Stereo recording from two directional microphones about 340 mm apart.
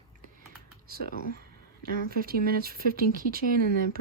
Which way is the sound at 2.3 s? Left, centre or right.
Right.